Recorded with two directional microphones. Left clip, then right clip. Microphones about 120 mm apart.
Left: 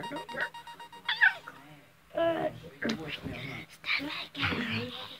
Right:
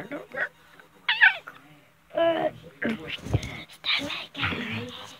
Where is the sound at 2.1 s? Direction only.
50° right (ahead or behind).